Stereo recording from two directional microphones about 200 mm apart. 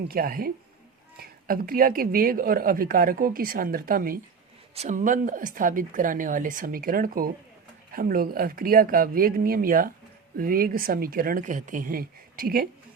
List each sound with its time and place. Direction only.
0.1 s speech: 45° right (ahead or behind)
4.7 s speech: 35° right (ahead or behind)